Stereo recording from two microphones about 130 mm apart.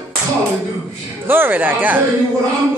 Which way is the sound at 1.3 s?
15° right (ahead or behind).